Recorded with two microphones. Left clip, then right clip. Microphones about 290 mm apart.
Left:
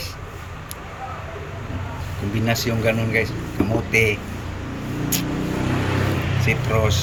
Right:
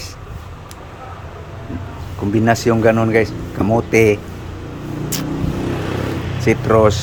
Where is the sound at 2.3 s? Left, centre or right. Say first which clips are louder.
Right 9 dB; centre.